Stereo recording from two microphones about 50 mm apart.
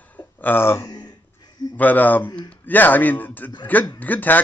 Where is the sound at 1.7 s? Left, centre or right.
Left.